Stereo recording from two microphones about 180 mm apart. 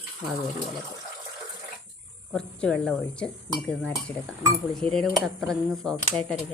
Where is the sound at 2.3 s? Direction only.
5° left (ahead or behind).